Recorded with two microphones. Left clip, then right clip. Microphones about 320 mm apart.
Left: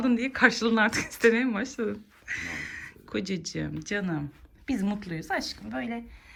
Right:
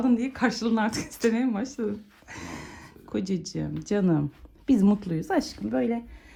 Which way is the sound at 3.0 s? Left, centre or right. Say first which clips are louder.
Right 2 dB; centre.